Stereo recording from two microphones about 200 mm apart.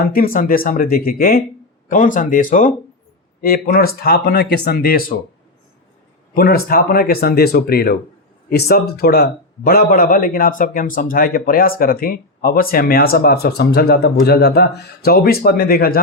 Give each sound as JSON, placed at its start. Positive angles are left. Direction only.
{"t": 0.0, "sound": "speech", "side_deg": 45}
{"t": 6.3, "sound": "speech", "side_deg": 45}